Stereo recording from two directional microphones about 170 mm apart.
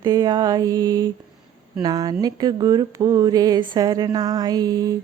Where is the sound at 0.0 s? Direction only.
25° right (ahead or behind).